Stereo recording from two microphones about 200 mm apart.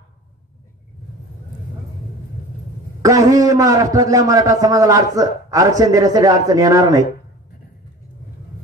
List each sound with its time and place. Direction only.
3.0 s a man's voice: 15° right (ahead or behind)